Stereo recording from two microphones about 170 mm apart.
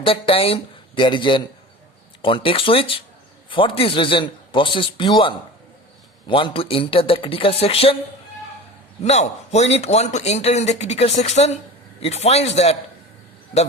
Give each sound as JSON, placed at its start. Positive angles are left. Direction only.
{"t": 0.0, "sound": "a man's voice", "side_deg": 35}
{"t": 9.0, "sound": "a man's voice", "side_deg": 40}